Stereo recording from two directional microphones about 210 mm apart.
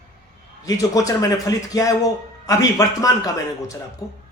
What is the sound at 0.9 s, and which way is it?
A man's voice, 15° left (ahead or behind).